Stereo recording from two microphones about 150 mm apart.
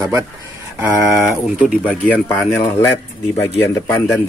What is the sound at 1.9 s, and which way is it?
A man's voice, 10° left (ahead or behind).